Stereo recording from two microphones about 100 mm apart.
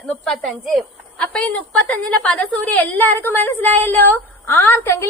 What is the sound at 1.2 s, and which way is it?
A woman's voice, 15° left (ahead or behind).